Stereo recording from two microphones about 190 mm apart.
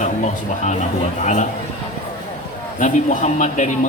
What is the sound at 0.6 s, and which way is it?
Speech, 40° left (ahead or behind).